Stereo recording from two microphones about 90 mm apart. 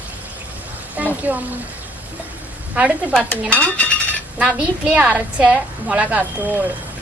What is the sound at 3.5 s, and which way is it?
Cutlery, 15° left (ahead or behind).